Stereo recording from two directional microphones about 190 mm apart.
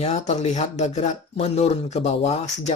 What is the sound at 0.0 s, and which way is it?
Speech, 35° left (ahead or behind).